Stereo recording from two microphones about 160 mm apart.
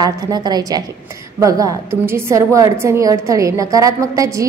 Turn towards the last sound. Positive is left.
turn(degrees=-20)  # may be behind; listen again after turning